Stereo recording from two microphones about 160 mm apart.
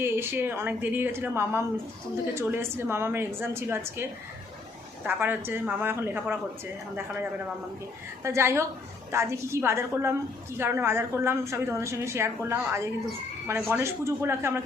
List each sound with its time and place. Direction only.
0.0 s a woman's voice: 15° right (ahead or behind)
5.0 s a woman's voice: 15° right (ahead or behind)
8.2 s a woman's voice: 15° right (ahead or behind)